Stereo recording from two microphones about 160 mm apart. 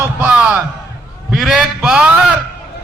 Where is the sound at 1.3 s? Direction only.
5° right (ahead or behind).